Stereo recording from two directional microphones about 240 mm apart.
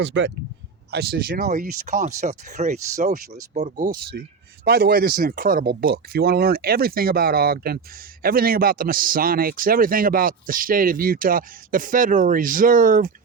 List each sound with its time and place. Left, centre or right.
0.0 s a man's voice: right